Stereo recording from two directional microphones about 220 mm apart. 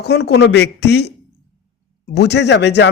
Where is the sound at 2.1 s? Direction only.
50° left (ahead or behind).